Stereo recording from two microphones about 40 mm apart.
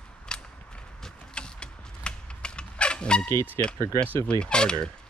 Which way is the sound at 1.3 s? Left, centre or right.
Left.